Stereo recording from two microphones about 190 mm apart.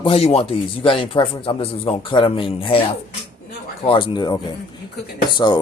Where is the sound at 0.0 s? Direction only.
30° left (ahead or behind).